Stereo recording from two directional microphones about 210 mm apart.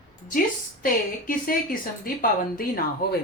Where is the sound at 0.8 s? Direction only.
40° left (ahead or behind).